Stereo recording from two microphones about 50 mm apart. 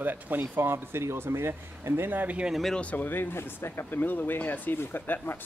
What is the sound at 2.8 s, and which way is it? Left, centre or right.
Speech, left.